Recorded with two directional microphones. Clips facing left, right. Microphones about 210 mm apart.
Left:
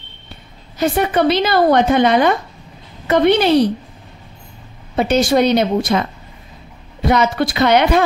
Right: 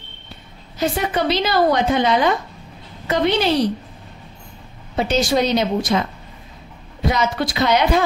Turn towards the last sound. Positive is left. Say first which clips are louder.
# left 4 dB
turn(degrees=60)  # may be behind; listen again after turning